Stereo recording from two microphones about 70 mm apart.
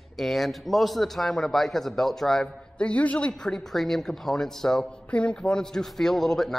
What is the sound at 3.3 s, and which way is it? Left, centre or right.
A man's voice, centre.